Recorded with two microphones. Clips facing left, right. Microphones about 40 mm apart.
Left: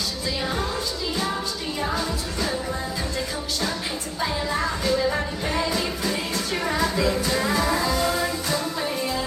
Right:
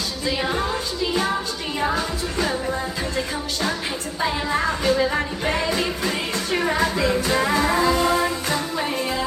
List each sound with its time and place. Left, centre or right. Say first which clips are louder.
0.4 s music: right 2 dB; right
1.8 s music: right 4 dB; right
4.2 s music: right 3 dB; right